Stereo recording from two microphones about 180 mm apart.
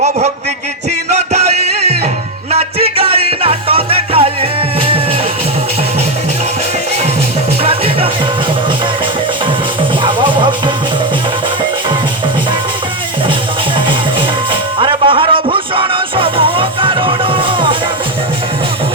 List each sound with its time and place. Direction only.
2.5 s music: 35° right (ahead or behind)
7.6 s music: 30° right (ahead or behind)
10.0 s music: 25° right (ahead or behind)
13.7 s music: 25° right (ahead or behind)